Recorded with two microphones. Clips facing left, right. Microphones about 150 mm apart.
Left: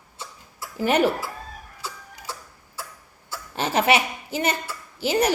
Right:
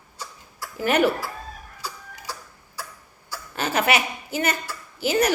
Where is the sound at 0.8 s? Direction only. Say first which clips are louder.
Even; 35° left (ahead or behind).